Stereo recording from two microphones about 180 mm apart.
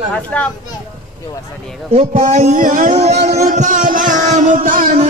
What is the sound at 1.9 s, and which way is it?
A man's voice, 35° right (ahead or behind).